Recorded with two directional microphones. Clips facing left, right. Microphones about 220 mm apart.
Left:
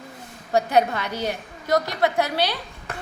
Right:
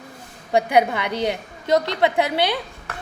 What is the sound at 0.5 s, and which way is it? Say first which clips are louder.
A woman's voice: right 2 dB; 15° right (ahead or behind).